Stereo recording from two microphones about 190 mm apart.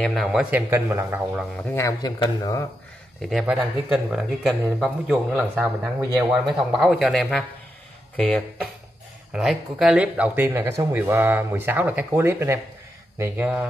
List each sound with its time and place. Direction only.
0.0 s speech: centre (ahead or behind)
1.6 s speech: 15° left (ahead or behind)
3.3 s speech: centre (ahead or behind)
9.3 s speech: centre (ahead or behind)